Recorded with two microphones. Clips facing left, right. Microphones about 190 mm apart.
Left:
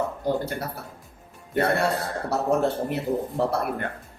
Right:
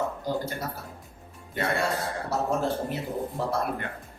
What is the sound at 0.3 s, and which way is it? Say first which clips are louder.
Speech: left 4 dB; 60° left (ahead or behind).